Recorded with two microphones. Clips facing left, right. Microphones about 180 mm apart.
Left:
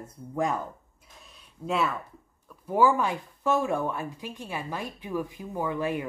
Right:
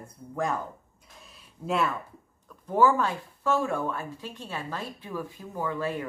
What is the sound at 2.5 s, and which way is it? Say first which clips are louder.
Speech: even; 10° left (ahead or behind).